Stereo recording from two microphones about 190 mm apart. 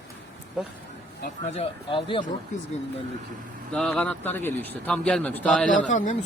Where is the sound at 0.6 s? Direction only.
5° right (ahead or behind).